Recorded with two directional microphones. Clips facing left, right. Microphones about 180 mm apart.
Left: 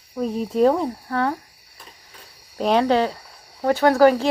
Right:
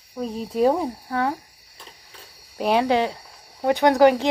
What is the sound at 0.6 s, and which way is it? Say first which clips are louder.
Speech: left 2 dB; 10° right (ahead or behind).